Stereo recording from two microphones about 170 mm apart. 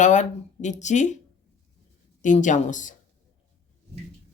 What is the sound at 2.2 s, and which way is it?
Speech, 45° left (ahead or behind).